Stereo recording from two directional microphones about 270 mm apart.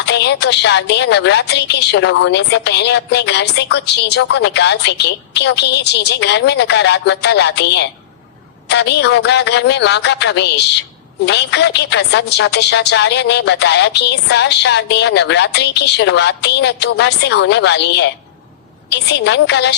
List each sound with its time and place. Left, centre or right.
0.0 s a woman's voice: left